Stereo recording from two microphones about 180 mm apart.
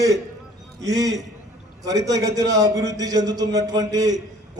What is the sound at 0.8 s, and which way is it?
A man's voice, 20° right (ahead or behind).